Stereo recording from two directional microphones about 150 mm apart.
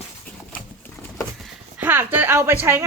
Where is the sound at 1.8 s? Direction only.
15° right (ahead or behind).